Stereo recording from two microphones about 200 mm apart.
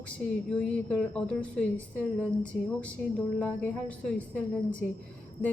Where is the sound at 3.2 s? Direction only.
5° left (ahead or behind).